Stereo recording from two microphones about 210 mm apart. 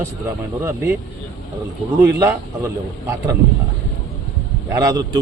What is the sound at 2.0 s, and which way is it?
Speech, 15° right (ahead or behind).